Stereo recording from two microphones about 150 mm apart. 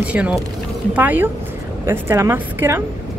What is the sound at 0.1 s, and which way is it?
Speech, 10° right (ahead or behind).